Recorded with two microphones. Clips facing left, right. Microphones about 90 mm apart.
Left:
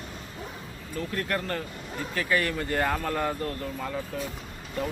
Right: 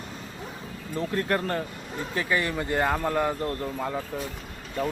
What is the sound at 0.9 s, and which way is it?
Speech, 25° right (ahead or behind).